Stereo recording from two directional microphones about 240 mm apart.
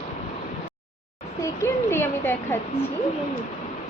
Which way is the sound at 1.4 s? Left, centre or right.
Centre.